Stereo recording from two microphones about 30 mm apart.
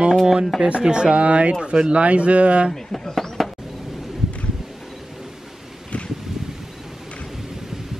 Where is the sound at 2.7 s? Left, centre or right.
Centre.